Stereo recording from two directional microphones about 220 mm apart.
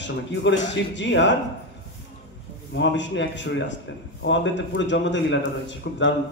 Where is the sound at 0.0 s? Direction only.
55° left (ahead or behind).